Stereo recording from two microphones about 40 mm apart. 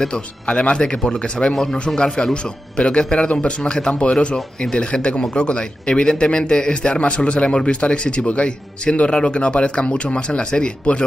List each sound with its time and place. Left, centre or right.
0.1 s a man's voice: left
1.5 s a man's voice: centre
2.0 s a man's voice: left